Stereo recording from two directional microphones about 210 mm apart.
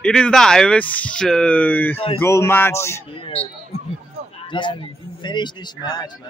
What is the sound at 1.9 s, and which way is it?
Speech, 25° left (ahead or behind).